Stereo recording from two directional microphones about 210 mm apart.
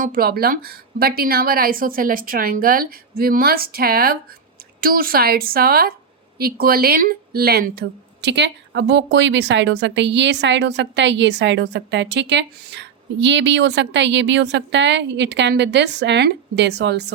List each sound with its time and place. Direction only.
0.0 s a woman's voice: 45° right (ahead or behind)